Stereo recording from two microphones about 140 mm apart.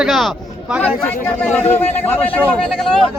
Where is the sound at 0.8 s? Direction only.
10° left (ahead or behind).